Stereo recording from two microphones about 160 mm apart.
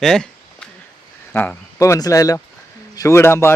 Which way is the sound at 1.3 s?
10° left (ahead or behind).